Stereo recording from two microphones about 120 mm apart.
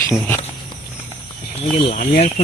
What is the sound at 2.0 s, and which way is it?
Speech, 60° left (ahead or behind).